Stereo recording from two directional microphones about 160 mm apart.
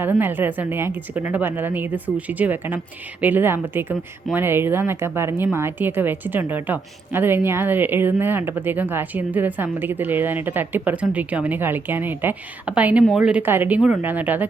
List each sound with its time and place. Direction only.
0.0 s a woman's voice: 15° right (ahead or behind)